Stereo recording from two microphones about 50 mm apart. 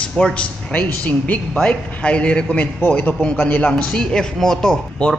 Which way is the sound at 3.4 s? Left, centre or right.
Left.